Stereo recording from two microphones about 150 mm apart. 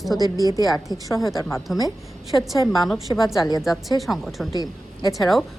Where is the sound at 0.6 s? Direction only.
25° left (ahead or behind).